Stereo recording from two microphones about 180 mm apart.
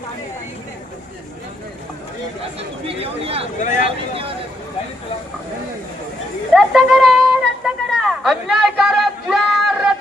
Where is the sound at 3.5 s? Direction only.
45° left (ahead or behind).